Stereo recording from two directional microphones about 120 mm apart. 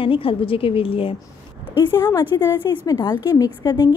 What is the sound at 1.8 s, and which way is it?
A woman's voice, 25° left (ahead or behind).